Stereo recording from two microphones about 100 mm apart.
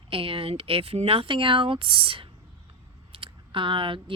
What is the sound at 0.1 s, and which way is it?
Speech, 65° right (ahead or behind).